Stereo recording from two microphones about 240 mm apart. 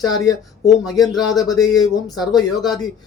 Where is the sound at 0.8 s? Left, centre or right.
Centre.